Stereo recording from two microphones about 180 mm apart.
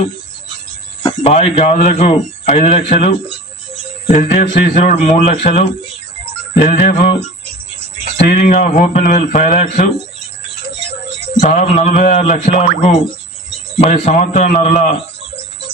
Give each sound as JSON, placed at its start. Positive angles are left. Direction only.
{"t": 1.2, "sound": "speech", "side_deg": 35}
{"t": 4.1, "sound": "a man's voice", "side_deg": 45}
{"t": 8.2, "sound": "a man's voice", "side_deg": 45}
{"t": 11.3, "sound": "speech", "side_deg": 40}